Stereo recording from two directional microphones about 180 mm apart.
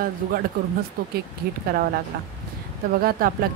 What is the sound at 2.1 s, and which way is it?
Speech, 60° right (ahead or behind).